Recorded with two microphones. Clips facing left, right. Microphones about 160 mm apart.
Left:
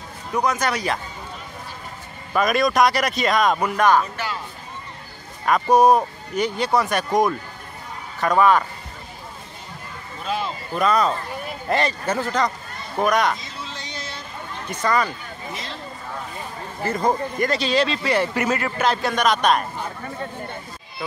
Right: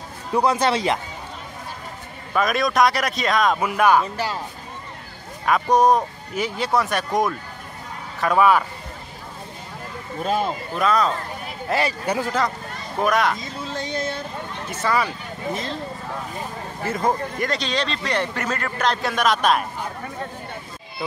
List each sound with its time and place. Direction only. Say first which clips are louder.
0.3 s speech: right 3 dB; 30° right (ahead or behind)
2.3 s speech: left 1 dB; centre (ahead or behind)
4.0 s speech: right 2 dB; 35° right (ahead or behind)
5.4 s speech: left 2 dB; 5° left (ahead or behind)
10.2 s speech: right 4 dB; 45° right (ahead or behind)
10.7 s speech: left 2 dB; centre (ahead or behind)
13.4 s a sound: right 6 dB; 50° right (ahead or behind)
14.7 s speech: left 1 dB; 5° right (ahead or behind)
15.5 s speech: right 6 dB; 50° right (ahead or behind)
16.8 s speech: left 1 dB; 5° right (ahead or behind)